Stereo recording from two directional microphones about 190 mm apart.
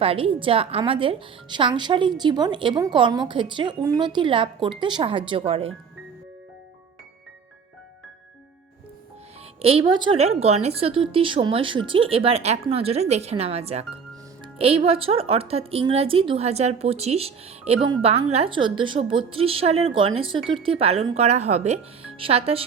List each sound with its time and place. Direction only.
0.0 s a woman's voice: 30° right (ahead or behind)
9.6 s a woman's voice: 30° right (ahead or behind)